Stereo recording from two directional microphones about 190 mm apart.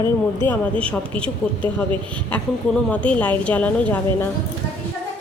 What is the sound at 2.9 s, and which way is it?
A woman's voice, 5° left (ahead or behind).